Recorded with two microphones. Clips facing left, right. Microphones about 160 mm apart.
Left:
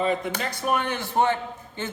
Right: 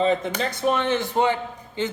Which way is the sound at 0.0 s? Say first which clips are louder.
Right 3 dB; 25° right (ahead or behind).